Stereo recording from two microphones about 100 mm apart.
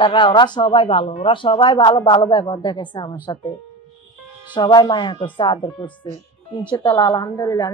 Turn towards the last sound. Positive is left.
turn(degrees=35)  # may be behind; listen again after turning